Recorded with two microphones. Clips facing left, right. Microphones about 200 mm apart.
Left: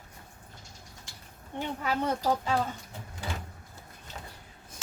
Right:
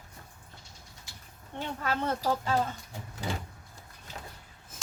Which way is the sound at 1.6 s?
15° left (ahead or behind).